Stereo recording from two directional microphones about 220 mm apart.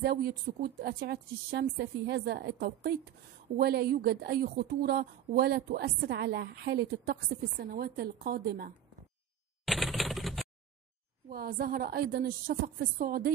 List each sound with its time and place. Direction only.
0.0 s a woman's voice: 45° right (ahead or behind)
9.7 s typewriter: centre (ahead or behind)
11.2 s a woman's voice: 45° right (ahead or behind)